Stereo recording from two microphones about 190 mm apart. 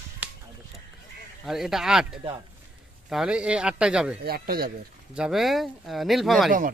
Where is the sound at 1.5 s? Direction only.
Centre (ahead or behind).